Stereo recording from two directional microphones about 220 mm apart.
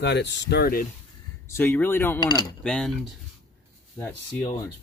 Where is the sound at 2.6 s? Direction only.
5° left (ahead or behind).